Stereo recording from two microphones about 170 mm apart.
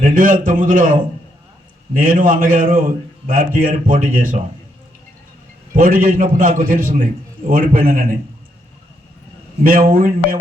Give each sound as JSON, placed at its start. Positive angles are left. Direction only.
{"t": 0.0, "sound": "a man's voice", "side_deg": -55}
{"t": 2.0, "sound": "a man's voice", "side_deg": -55}
{"t": 5.7, "sound": "a man's voice", "side_deg": -55}
{"t": 9.6, "sound": "a man's voice", "side_deg": -55}